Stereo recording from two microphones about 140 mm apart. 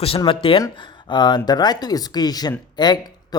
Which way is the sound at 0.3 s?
40° left (ahead or behind).